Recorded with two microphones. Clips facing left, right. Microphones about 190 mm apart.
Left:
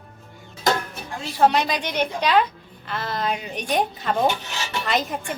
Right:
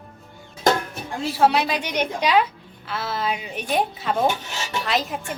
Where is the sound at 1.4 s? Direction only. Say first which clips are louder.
Left 1 dB; 5° right (ahead or behind).